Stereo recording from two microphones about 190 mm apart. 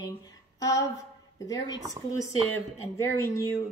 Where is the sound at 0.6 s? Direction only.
15° left (ahead or behind).